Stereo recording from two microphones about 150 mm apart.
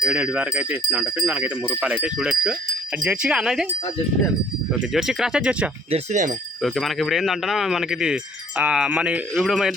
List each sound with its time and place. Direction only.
0.0 s speech: 5° right (ahead or behind)
4.9 s speech: centre (ahead or behind)
5.9 s speech: 50° right (ahead or behind)
6.6 s speech: centre (ahead or behind)